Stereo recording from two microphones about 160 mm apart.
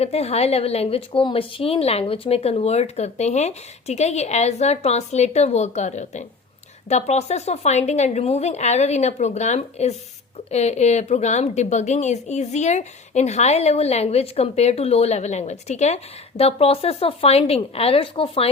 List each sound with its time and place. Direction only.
0.0 s a woman's voice: 40° left (ahead or behind)